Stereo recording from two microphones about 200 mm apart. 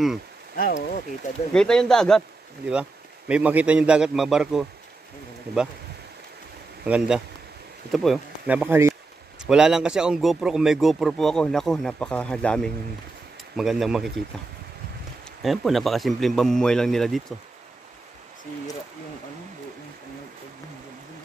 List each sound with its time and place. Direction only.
0.6 s speech: 45° left (ahead or behind)
1.5 s a man's voice: 5° left (ahead or behind)
5.5 s speech: 55° right (ahead or behind)
6.8 s a man's voice: 5° right (ahead or behind)
15.4 s a man's voice: centre (ahead or behind)